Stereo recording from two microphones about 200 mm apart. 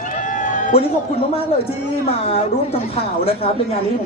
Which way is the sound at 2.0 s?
30° left (ahead or behind).